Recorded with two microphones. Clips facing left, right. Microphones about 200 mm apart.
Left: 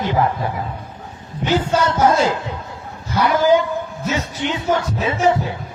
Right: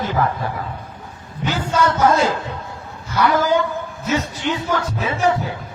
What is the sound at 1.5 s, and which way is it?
Music, 25° left (ahead or behind).